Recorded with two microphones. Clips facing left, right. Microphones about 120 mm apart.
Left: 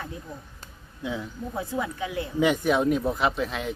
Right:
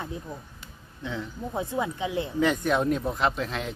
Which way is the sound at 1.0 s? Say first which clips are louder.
Left 2 dB; 10° left (ahead or behind).